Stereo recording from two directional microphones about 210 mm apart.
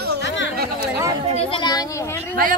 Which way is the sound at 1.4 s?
25° left (ahead or behind).